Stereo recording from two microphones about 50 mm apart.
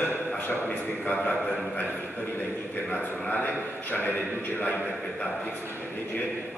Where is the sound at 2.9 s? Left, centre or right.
Left.